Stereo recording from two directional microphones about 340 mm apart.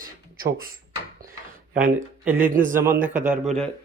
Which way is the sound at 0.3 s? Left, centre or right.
Right.